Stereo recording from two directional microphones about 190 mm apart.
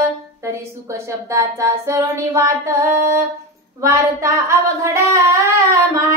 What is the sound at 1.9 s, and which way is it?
Speech, 15° right (ahead or behind).